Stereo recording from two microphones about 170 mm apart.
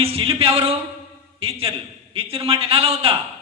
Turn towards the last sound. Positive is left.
turn(degrees=-30)  # may be behind; listen again after turning